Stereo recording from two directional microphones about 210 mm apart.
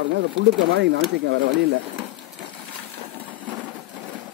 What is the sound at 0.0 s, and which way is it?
Speech, 60° right (ahead or behind).